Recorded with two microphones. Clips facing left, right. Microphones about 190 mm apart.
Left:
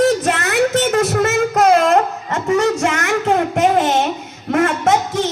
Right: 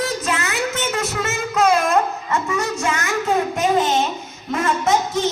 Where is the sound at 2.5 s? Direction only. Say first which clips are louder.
Left 11 dB; 70° left (ahead or behind).